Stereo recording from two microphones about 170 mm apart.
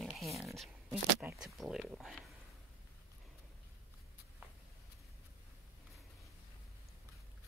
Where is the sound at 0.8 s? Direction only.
15° right (ahead or behind).